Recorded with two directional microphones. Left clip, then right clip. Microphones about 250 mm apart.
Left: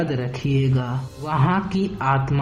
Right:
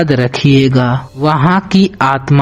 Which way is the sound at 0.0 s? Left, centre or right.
Right.